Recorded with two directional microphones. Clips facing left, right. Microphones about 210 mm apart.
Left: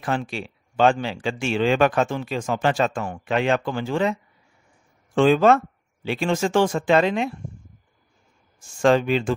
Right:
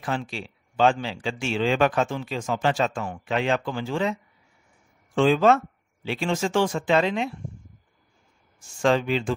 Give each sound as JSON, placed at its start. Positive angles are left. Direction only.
{"t": 0.0, "sound": "speech", "side_deg": 55}
{"t": 8.5, "sound": "speech", "side_deg": 50}